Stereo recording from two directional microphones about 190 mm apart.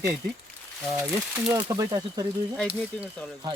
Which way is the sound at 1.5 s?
20° right (ahead or behind).